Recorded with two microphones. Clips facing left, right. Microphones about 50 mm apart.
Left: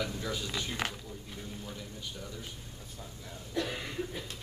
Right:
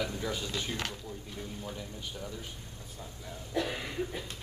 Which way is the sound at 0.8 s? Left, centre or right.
Centre.